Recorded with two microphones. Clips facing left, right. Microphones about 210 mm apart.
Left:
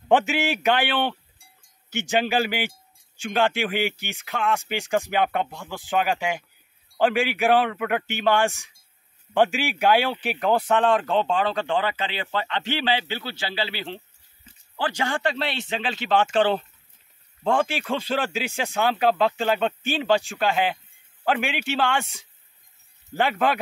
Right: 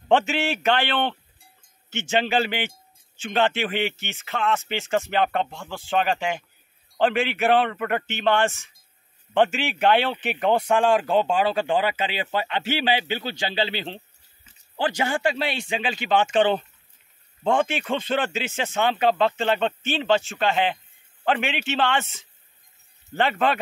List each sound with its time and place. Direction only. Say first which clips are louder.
0.1 s speech: even; centre (ahead or behind); by 14.0 s 20° right (ahead or behind)
15.0 s speech: even; 5° right (ahead or behind)